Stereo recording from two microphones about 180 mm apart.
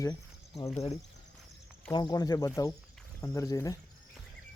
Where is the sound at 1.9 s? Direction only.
25° left (ahead or behind).